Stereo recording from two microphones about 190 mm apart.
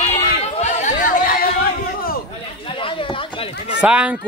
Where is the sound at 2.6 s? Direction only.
25° left (ahead or behind).